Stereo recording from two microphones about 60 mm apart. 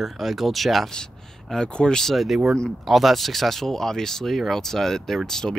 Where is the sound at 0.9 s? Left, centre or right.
Centre.